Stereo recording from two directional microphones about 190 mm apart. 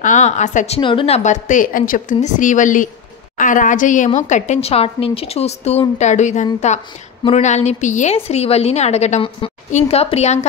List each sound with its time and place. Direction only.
0.0 s a woman's voice: 40° left (ahead or behind)